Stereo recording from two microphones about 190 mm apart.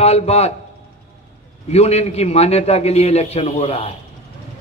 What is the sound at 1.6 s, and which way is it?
A man's voice, 35° left (ahead or behind).